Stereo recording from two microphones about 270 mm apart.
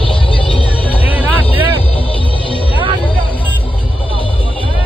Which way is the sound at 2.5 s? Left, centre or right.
Centre.